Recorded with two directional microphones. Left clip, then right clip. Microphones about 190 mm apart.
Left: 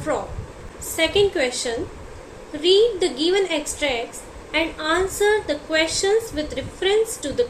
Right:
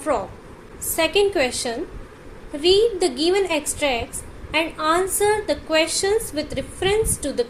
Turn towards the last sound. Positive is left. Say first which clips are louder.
# left 1 dB
turn(degrees=-45)  # may be behind; listen again after turning